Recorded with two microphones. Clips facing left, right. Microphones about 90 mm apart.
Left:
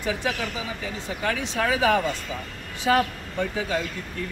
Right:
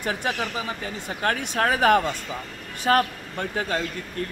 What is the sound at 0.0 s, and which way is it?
Speech, 50° right (ahead or behind).